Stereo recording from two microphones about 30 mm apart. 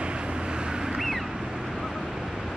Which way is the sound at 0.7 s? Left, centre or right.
Right.